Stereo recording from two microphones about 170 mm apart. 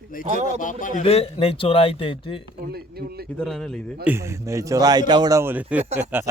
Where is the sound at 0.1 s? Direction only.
55° left (ahead or behind).